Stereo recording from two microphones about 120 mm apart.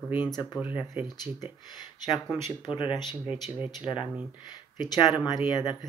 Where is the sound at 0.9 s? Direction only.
25° right (ahead or behind).